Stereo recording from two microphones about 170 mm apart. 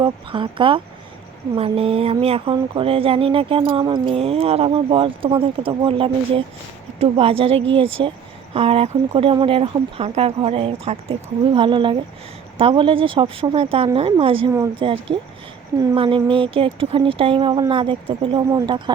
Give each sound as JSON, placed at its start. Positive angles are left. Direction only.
{"t": 0.0, "sound": "speech", "side_deg": -30}